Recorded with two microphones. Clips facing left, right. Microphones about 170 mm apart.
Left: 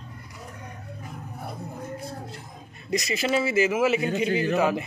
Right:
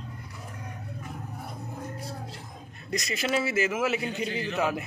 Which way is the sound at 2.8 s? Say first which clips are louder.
Left 4 dB; 5° left (ahead or behind).